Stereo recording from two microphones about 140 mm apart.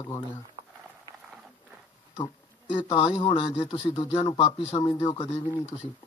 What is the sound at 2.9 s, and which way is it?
Speech, 40° left (ahead or behind).